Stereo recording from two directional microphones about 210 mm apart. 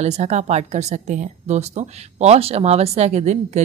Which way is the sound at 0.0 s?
30° right (ahead or behind).